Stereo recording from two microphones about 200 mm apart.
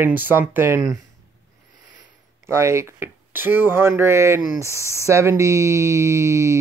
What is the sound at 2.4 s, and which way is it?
Speech, 15° right (ahead or behind).